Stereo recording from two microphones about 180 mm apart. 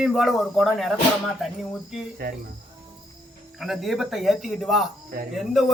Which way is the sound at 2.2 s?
60° right (ahead or behind).